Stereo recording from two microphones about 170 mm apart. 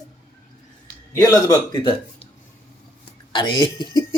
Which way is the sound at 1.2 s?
20° left (ahead or behind).